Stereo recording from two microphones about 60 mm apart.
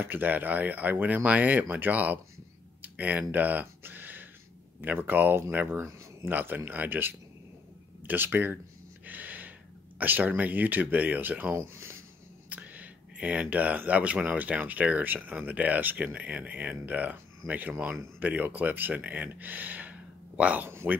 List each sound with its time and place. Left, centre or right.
0.0 s speech: right
2.8 s a sound: right
4.8 s speech: right
9.0 s gasp: right
9.9 s speech: right
11.6 s speech: right
12.4 s speech: right
20.6 s speech: right